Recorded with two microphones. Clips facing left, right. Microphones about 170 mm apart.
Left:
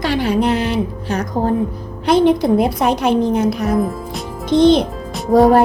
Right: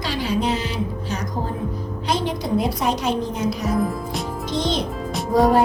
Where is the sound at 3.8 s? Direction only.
Centre (ahead or behind).